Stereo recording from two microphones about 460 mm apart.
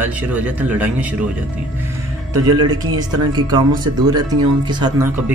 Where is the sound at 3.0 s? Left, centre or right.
Centre.